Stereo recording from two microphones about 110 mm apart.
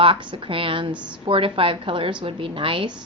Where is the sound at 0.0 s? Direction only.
55° right (ahead or behind).